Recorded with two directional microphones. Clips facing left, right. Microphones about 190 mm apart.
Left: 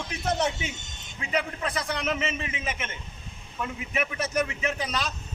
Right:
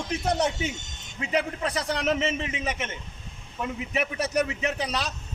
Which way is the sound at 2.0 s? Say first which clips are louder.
Right 4 dB; 40° right (ahead or behind).